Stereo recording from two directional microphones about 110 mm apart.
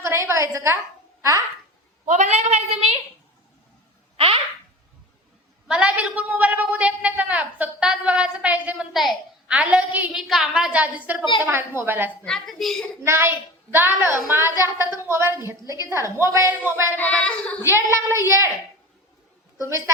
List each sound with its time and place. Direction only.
0.0 s a woman's voice: 25° right (ahead or behind)
2.0 s a woman's voice: 90° right
5.6 s a woman's voice: 10° right (ahead or behind)
8.9 s a woman's voice: centre (ahead or behind)
10.2 s a woman's voice: centre (ahead or behind); by 12.1 s 20° right (ahead or behind)
12.2 s a woman's voice: 5° left (ahead or behind)
13.0 s a woman's voice: 20° right (ahead or behind)
17.0 s child singing: 10° left (ahead or behind)
17.7 s a woman's voice: 25° right (ahead or behind)